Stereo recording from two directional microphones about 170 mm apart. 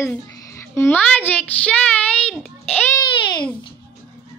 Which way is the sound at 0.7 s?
10° left (ahead or behind).